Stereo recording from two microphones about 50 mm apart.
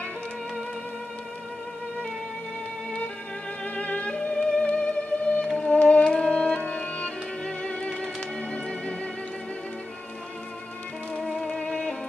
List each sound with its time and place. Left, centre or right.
3.6 s music: left
11.1 s music: centre
11.4 s music: centre